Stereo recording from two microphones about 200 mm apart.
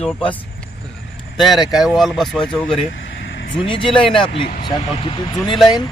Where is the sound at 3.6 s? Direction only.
25° left (ahead or behind).